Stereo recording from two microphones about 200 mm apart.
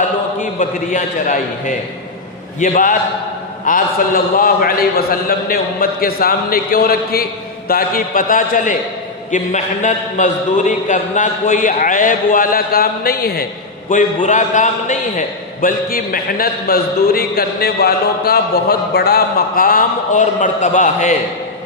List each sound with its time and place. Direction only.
0.6 s a man's voice: 40° left (ahead or behind)